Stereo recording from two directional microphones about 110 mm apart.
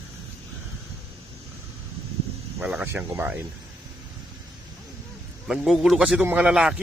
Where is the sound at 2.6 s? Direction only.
10° right (ahead or behind).